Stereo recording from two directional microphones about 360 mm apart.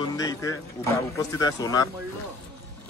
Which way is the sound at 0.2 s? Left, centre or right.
Centre.